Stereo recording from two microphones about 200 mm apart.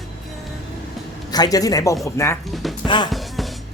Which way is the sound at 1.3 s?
20° left (ahead or behind).